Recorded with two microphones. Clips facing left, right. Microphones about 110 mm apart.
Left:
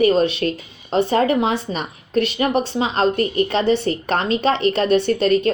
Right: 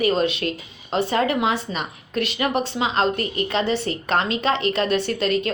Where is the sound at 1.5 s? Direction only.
55° left (ahead or behind).